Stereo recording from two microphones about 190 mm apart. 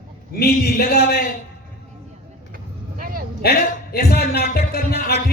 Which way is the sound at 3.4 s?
55° left (ahead or behind).